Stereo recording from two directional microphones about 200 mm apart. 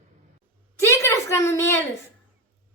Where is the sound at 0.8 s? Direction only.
15° left (ahead or behind).